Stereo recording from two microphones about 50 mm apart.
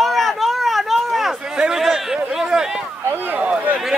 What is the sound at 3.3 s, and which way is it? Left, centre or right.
Speech, right.